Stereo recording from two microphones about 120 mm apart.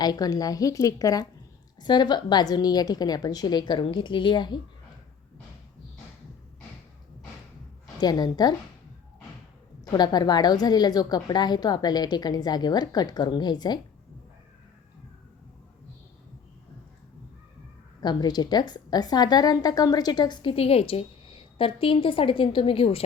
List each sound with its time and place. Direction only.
0.0 s a woman's voice: 35° left (ahead or behind)
7.9 s a woman's voice: 35° left (ahead or behind)
9.8 s a woman's voice: 35° left (ahead or behind)
18.0 s a woman's voice: 35° left (ahead or behind)